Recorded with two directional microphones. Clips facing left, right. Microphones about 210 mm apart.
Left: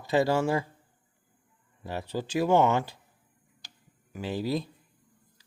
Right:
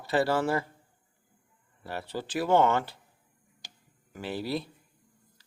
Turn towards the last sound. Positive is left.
turn(degrees=15)  # may be behind; listen again after turning